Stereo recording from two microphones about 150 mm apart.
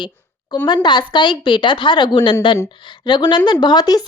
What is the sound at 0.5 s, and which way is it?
A woman's voice, 30° left (ahead or behind).